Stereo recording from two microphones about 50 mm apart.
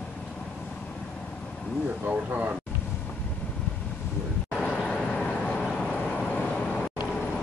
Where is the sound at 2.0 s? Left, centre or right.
Right.